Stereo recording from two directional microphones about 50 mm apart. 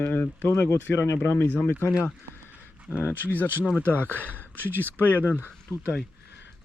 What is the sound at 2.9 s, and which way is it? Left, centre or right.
Speech, left.